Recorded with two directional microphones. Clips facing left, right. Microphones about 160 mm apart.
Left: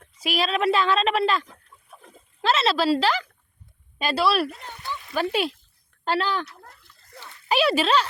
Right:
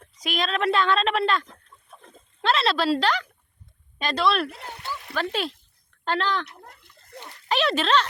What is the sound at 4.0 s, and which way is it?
Speech, 5° left (ahead or behind).